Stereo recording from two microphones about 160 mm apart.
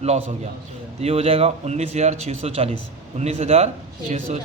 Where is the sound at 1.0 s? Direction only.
40° right (ahead or behind).